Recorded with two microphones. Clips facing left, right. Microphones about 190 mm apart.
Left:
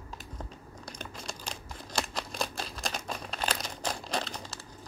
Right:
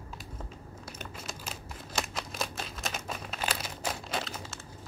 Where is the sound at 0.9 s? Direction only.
5° right (ahead or behind).